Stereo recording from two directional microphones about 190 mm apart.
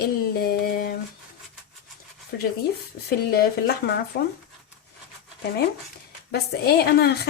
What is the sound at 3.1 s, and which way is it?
A woman's voice, 55° left (ahead or behind).